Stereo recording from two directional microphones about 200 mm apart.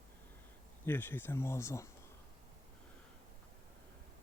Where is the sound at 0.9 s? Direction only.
10° left (ahead or behind).